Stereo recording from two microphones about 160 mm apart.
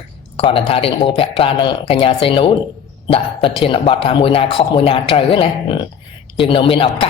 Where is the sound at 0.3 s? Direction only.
35° left (ahead or behind).